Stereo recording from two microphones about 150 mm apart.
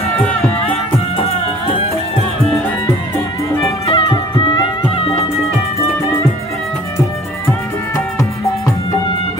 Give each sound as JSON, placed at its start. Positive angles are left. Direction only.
{"t": 3.8, "sound": "music", "side_deg": 35}